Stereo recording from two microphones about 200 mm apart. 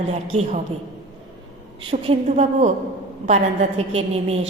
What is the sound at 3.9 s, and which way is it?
Speech, 30° right (ahead or behind).